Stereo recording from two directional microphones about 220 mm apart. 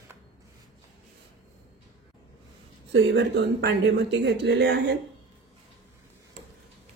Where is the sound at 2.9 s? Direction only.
55° right (ahead or behind).